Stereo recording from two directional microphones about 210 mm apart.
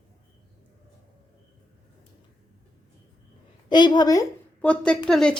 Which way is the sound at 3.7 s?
20° left (ahead or behind).